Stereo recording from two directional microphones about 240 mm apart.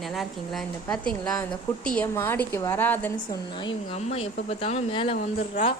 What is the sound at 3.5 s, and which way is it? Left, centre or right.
Speech, left.